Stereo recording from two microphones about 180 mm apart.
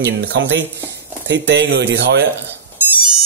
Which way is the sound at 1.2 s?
75° right (ahead or behind).